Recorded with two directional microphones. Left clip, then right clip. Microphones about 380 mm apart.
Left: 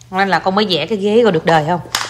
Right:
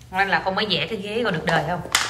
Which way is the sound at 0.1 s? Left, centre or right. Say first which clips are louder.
Left 6 dB; centre.